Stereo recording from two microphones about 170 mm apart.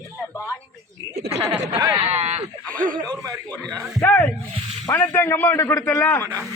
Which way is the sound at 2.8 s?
50° right (ahead or behind).